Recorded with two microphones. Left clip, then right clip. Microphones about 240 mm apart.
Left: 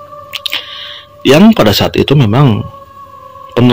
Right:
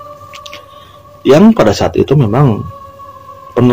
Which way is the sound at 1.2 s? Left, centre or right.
Left.